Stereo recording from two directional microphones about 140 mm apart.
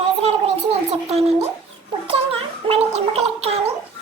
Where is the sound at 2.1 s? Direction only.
40° right (ahead or behind).